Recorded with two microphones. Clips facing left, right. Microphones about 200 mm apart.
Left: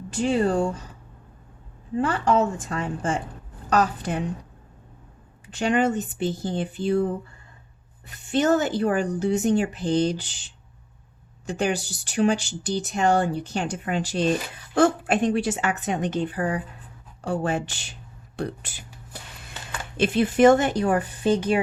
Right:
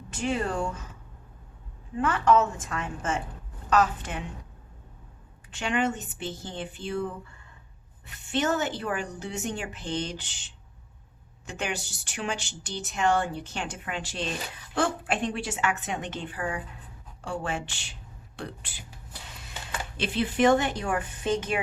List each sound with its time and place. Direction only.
0.1 s speech: 30° left (ahead or behind)
2.0 s speech: 30° left (ahead or behind)
5.5 s speech: 40° left (ahead or behind)
18.3 s a sound: 40° left (ahead or behind)
20.0 s speech: 45° left (ahead or behind)